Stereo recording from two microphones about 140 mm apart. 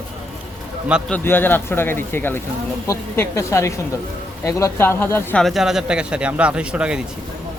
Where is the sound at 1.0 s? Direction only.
10° left (ahead or behind).